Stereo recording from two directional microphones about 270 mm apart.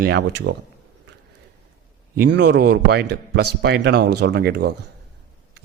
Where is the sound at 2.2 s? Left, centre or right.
Right.